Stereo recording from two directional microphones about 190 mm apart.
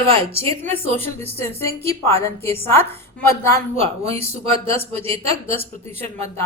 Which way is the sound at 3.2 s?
15° left (ahead or behind).